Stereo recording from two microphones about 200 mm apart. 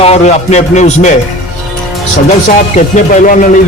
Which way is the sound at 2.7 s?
40° left (ahead or behind).